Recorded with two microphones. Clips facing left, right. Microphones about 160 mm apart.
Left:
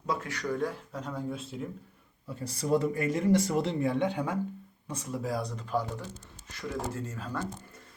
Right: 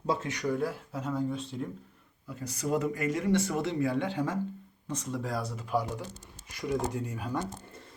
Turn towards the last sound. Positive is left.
turn(degrees=-15)  # may be behind; listen again after turning